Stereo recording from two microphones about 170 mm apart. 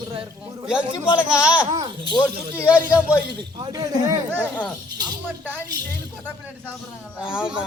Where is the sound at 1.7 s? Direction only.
25° right (ahead or behind).